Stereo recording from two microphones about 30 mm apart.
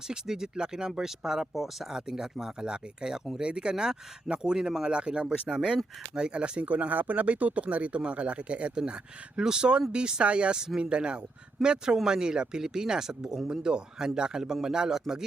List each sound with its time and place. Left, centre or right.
0.3 s speech: right
2.0 s speech: right
6.3 s speech: right
6.7 s speech: right
8.7 s speech: right; by 13.5 s centre
13.5 s speech: right